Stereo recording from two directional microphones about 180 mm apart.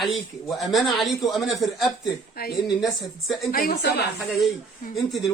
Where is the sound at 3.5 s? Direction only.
55° left (ahead or behind).